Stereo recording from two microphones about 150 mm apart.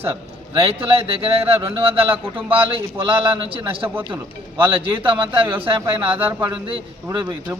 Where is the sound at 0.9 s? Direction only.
40° right (ahead or behind).